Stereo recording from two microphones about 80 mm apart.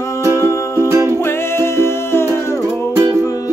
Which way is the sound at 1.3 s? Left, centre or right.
Left.